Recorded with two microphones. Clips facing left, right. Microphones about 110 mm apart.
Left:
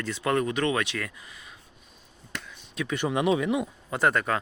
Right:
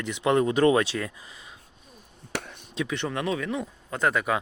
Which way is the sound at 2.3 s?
65° right (ahead or behind).